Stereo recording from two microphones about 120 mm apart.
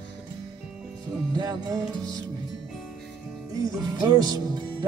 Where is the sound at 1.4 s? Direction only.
35° right (ahead or behind).